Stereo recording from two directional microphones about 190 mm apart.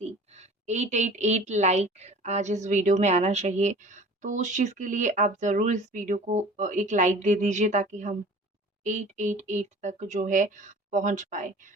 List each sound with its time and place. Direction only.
0.0 s a woman's voice: 35° right (ahead or behind)